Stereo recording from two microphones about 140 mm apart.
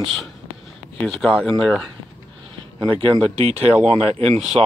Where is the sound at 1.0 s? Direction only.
5° left (ahead or behind).